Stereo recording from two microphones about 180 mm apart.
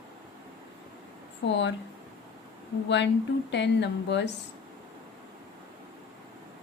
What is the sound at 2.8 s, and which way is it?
A woman's voice, 80° left.